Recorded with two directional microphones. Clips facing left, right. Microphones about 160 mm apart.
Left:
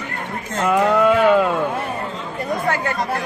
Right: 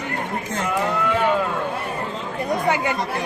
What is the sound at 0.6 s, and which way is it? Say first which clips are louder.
Speech: left 8 dB; 80° left.